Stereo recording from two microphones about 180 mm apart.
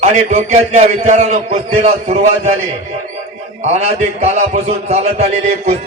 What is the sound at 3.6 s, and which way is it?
A man's voice, 40° right (ahead or behind).